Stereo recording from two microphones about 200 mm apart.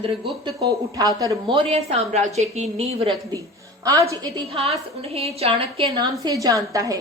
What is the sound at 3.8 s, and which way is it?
A woman's voice, 15° right (ahead or behind).